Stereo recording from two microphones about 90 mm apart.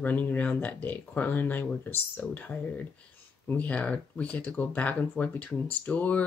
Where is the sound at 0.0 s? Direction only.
20° left (ahead or behind).